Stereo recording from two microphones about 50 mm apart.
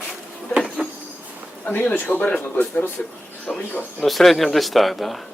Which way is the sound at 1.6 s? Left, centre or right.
Left.